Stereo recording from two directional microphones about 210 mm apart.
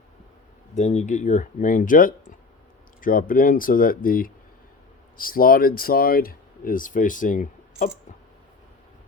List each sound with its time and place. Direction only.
0.8 s speech: 35° left (ahead or behind)